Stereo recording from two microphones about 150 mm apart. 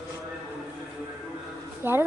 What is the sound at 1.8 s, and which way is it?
Speech, 15° right (ahead or behind).